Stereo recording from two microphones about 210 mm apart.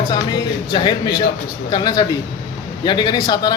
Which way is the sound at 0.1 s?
20° left (ahead or behind).